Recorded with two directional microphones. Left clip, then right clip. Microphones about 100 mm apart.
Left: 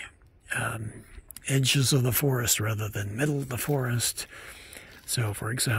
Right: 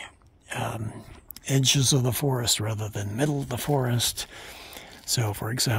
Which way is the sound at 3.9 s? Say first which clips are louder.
Right 4 dB; 55° right (ahead or behind).